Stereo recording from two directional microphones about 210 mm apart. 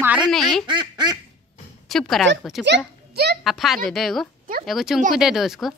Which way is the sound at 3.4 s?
Centre (ahead or behind).